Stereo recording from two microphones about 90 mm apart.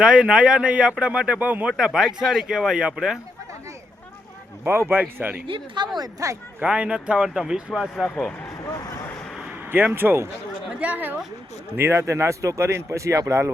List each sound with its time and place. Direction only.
0.0 s speech: 10° right (ahead or behind)
1.7 s speech: 5° right (ahead or behind)
4.6 s a man's voice: 25° right (ahead or behind)
5.5 s speech: 60° right (ahead or behind)
6.0 s speech: 40° right (ahead or behind)
6.6 s speech: 10° right (ahead or behind)
8.0 s speech: 10° left (ahead or behind)
9.7 s a man's voice: 25° right (ahead or behind)
10.7 s speech: 15° right (ahead or behind)
11.8 s speech: 30° right (ahead or behind)